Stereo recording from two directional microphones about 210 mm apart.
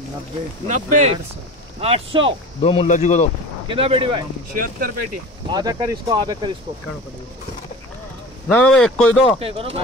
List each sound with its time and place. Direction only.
0.7 s speech: 35° right (ahead or behind)
2.6 s speech: 25° left (ahead or behind)
3.6 s speech: 25° right (ahead or behind)
4.6 s speech: 45° right (ahead or behind)
5.5 s speech: 15° right (ahead or behind)
8.5 s speech: 5° left (ahead or behind)
9.4 s speech: 25° right (ahead or behind)